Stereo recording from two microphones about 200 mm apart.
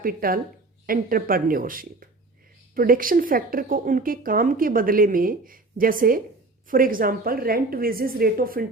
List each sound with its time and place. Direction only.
0.0 s a woman's voice: 45° right (ahead or behind)